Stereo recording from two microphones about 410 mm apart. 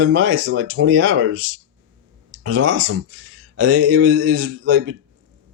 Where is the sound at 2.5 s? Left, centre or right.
Right.